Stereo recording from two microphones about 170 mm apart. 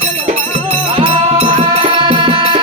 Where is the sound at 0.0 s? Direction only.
40° right (ahead or behind).